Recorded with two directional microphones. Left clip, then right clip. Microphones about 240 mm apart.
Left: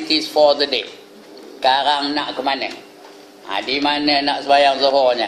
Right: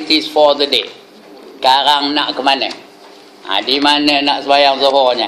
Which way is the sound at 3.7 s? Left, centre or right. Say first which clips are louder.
Right 4 dB; centre.